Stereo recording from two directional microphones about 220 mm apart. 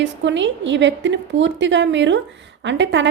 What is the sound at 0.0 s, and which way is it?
A woman's voice, 55° right (ahead or behind).